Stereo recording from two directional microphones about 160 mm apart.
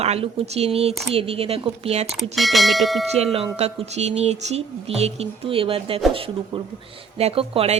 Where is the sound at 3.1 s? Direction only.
40° right (ahead or behind).